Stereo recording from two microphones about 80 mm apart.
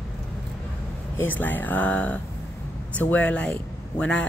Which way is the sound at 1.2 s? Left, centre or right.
Left.